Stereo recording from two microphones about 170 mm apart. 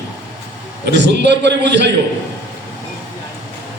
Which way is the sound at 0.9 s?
90° right.